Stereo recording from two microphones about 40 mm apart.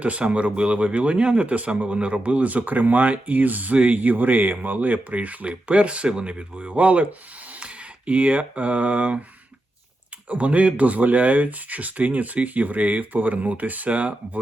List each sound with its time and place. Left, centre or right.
0.0 s speech: right
10.2 s speech: right